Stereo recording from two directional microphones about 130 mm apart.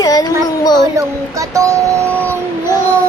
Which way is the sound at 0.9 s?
25° right (ahead or behind).